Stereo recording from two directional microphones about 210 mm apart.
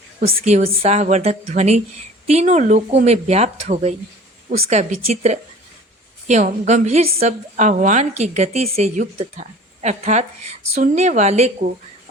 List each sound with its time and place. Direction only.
0.4 s a woman's voice: 30° right (ahead or behind)